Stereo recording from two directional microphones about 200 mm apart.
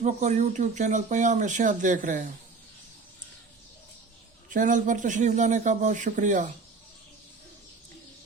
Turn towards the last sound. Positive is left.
turn(degrees=-40)  # may be behind; listen again after turning